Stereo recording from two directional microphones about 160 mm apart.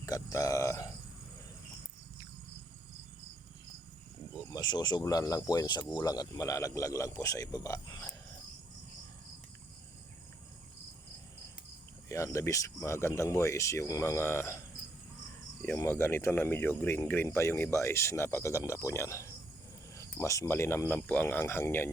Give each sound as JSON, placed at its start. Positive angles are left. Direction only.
{"t": 0.0, "sound": "a sound", "side_deg": 20}
{"t": 4.4, "sound": "speech", "side_deg": 25}
{"t": 12.0, "sound": "speech", "side_deg": 20}
{"t": 15.6, "sound": "speech", "side_deg": 15}